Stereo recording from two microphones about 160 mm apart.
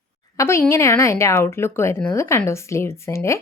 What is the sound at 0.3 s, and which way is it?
A woman's voice, 15° left (ahead or behind).